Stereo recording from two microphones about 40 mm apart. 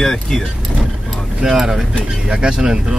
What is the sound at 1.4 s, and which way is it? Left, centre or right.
Speech, centre.